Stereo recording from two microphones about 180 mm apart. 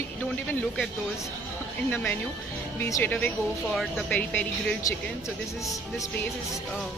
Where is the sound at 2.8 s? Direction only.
10° left (ahead or behind).